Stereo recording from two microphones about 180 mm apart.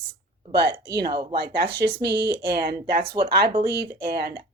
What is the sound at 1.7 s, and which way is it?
Speech, 70° right (ahead or behind).